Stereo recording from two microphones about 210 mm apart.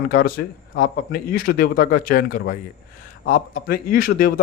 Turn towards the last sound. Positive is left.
turn(degrees=45)  # may be behind; listen again after turning